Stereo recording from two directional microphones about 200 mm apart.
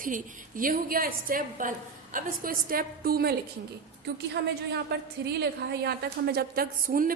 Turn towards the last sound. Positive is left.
turn(degrees=-45)  # may be behind; listen again after turning